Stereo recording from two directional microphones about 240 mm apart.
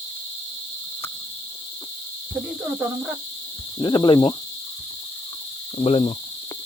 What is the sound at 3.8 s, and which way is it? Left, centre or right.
Speech, centre.